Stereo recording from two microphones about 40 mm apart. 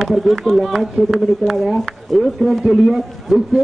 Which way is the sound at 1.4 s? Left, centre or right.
Right.